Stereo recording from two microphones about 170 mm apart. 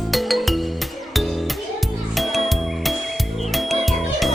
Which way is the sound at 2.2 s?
Centre (ahead or behind).